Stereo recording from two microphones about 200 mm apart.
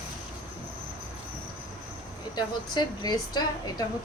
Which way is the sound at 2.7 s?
20° left (ahead or behind).